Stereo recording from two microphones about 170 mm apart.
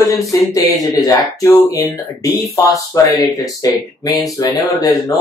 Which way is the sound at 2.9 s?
20° left (ahead or behind).